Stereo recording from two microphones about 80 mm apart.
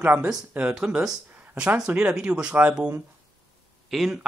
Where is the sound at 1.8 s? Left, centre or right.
Centre.